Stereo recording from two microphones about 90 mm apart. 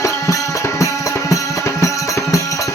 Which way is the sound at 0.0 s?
35° left (ahead or behind).